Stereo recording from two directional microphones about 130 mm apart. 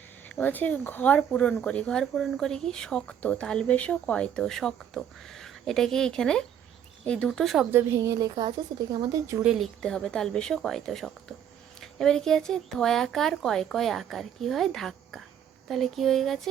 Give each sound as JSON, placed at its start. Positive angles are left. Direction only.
{"t": 0.3, "sound": "speech", "side_deg": 15}
{"t": 7.7, "sound": "a woman's voice", "side_deg": -20}
{"t": 9.4, "sound": "speech", "side_deg": 0}